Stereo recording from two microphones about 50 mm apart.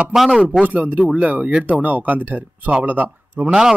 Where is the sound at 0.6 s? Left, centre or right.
Right.